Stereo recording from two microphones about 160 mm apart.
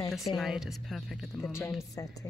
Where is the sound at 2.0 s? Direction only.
20° left (ahead or behind).